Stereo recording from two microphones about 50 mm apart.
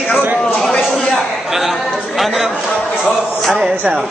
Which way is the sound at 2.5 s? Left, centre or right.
Left.